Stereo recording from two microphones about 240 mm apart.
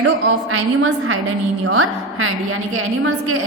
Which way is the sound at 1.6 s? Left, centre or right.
Right.